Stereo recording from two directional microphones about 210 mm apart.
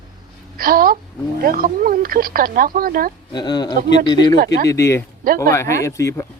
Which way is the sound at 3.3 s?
20° left (ahead or behind).